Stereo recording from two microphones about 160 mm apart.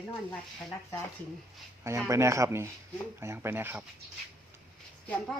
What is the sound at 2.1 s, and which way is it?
Speech, 20° right (ahead or behind).